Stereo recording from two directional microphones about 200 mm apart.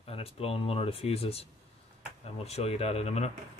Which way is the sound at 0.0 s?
30° left (ahead or behind).